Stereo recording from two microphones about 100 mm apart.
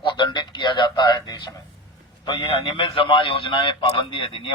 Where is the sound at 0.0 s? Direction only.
50° left (ahead or behind).